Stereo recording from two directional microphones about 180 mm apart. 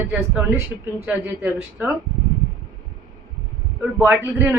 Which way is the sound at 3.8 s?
10° right (ahead or behind).